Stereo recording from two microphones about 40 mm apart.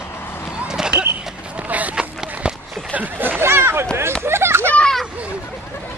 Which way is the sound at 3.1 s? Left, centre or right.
Right.